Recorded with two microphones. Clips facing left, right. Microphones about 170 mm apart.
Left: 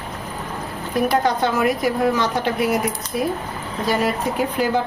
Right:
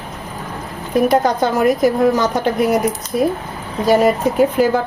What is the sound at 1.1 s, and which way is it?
A woman's voice, 40° right (ahead or behind).